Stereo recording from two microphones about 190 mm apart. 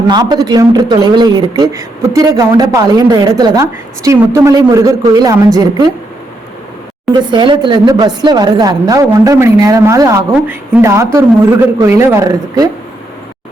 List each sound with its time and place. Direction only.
0.1 s speech: 20° right (ahead or behind)
7.1 s speech: 20° right (ahead or behind)